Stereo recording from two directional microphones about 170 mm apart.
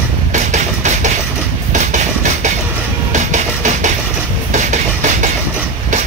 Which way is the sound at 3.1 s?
45° right (ahead or behind).